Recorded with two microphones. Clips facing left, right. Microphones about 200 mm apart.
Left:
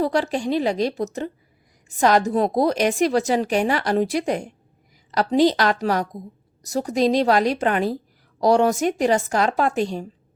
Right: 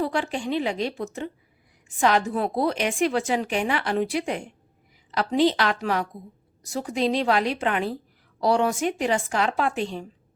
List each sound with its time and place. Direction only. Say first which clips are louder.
0.0 s a woman's voice: left 5 dB; 40° left (ahead or behind)